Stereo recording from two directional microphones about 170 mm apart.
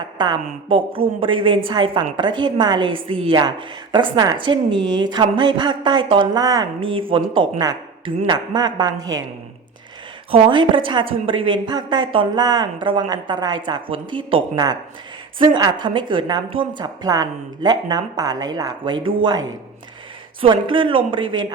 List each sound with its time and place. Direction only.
0.7 s a woman's voice: 30° right (ahead or behind)
10.3 s a woman's voice: 30° right (ahead or behind)